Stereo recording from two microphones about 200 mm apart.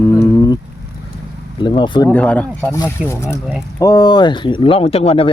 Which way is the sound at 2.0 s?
5° left (ahead or behind).